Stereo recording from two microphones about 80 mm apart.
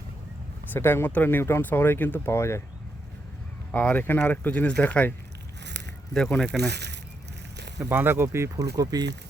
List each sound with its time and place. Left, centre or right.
0.7 s speech: left
3.7 s speech: centre
6.1 s speech: centre
7.9 s speech: right
8.5 s speech: right